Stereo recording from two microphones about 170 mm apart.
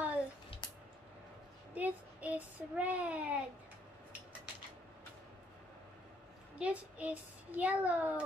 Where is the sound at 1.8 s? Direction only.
10° right (ahead or behind).